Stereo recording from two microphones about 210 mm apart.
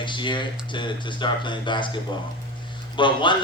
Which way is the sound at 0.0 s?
20° left (ahead or behind).